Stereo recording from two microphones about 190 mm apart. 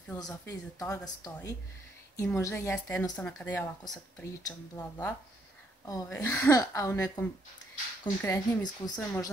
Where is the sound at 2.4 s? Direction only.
15° left (ahead or behind).